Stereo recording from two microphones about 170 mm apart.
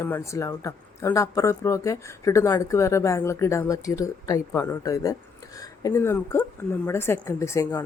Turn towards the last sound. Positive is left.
turn(degrees=15)  # may be behind; listen again after turning